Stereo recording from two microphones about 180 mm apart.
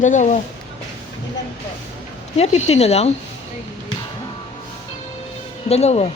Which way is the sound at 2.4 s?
40° left (ahead or behind).